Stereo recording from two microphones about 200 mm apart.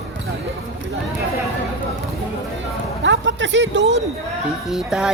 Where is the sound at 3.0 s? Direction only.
65° right (ahead or behind).